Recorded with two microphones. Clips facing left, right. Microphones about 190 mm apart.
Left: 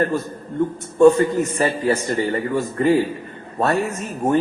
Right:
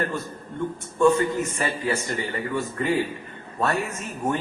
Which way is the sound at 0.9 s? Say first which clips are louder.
Left 7 dB; 40° left (ahead or behind).